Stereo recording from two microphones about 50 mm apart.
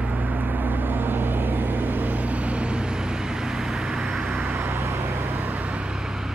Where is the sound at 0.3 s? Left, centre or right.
Right; by 4.4 s centre.